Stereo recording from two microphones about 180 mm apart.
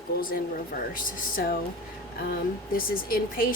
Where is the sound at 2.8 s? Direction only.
55° left (ahead or behind).